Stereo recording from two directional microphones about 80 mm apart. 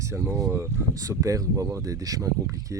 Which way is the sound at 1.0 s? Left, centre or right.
Right.